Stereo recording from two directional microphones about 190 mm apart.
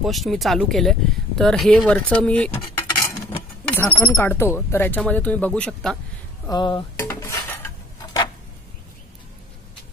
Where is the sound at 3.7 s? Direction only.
10° left (ahead or behind).